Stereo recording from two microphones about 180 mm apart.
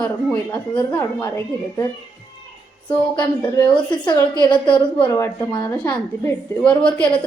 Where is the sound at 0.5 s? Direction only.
10° left (ahead or behind).